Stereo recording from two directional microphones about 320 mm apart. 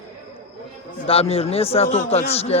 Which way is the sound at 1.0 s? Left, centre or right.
Centre.